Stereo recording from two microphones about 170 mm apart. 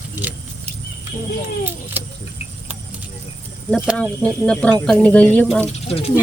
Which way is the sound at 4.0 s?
5° left (ahead or behind).